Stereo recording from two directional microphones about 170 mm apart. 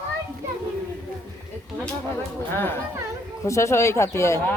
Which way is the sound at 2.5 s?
15° left (ahead or behind).